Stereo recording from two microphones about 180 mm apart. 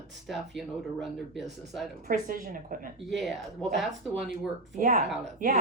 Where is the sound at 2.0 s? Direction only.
50° right (ahead or behind).